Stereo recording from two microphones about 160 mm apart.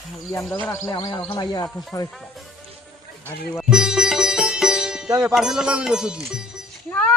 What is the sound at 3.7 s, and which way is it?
Sitar, 5° right (ahead or behind).